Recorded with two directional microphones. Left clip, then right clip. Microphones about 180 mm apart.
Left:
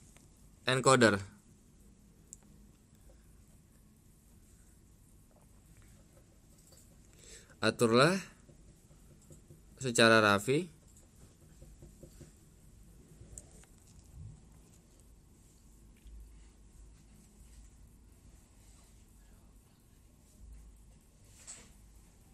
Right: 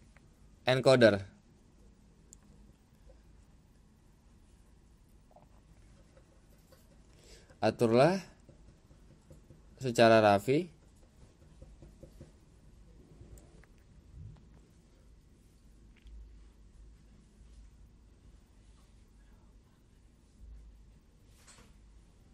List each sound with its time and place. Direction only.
0.7 s speech: centre (ahead or behind)
7.2 s speech: 5° left (ahead or behind)
9.8 s speech: centre (ahead or behind)